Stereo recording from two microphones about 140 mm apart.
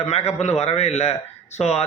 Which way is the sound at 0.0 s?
50° left (ahead or behind).